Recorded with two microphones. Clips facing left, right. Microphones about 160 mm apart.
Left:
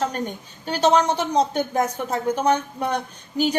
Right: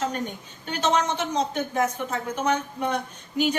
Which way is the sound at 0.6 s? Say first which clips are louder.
Left 5 dB; 35° left (ahead or behind).